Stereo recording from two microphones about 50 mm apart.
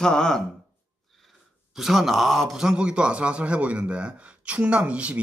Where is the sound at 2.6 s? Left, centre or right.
Centre.